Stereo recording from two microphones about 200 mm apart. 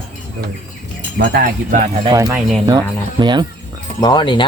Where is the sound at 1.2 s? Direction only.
55° right (ahead or behind).